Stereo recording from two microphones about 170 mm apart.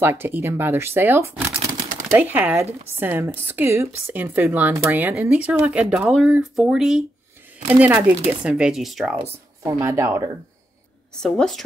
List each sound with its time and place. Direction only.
0.0 s speech: 15° right (ahead or behind)
9.6 s speech: 15° right (ahead or behind)
11.1 s a woman's voice: 5° left (ahead or behind)